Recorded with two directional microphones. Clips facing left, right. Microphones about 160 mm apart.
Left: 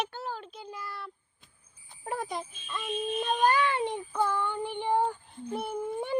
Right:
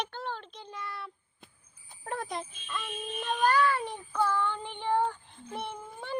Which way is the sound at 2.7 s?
15° left (ahead or behind).